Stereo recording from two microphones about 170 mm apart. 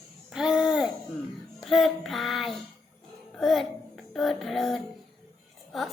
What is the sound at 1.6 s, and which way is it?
Speech, centre (ahead or behind).